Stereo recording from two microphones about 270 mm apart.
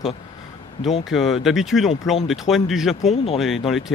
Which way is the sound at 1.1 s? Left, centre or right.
Centre.